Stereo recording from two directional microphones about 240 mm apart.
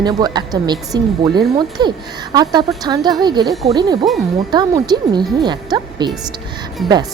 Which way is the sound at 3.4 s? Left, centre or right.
Centre.